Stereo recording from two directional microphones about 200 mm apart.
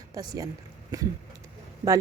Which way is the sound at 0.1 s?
20° right (ahead or behind).